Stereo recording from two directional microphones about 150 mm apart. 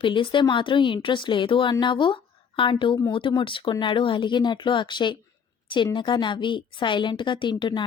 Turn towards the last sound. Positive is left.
turn(degrees=30)  # may be behind; listen again after turning